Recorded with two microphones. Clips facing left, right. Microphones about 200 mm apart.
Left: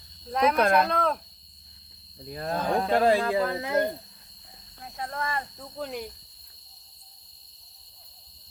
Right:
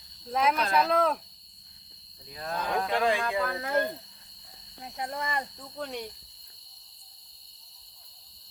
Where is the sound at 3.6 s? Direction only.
20° left (ahead or behind).